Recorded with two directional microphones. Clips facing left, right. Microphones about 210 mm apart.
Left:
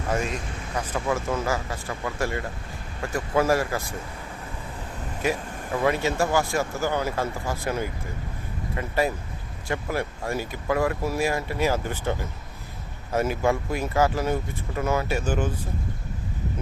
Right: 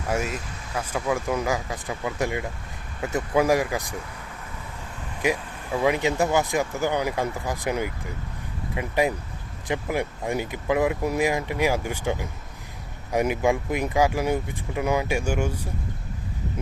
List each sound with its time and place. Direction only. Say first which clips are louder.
0.1 s speech: even; 5° right (ahead or behind)
5.2 s speech: right 1 dB; 15° right (ahead or behind)